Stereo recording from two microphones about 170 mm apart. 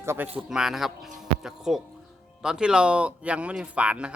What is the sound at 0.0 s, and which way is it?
Speech, 15° right (ahead or behind).